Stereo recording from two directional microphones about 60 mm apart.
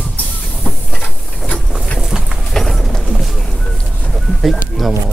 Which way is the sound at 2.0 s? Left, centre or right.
Centre.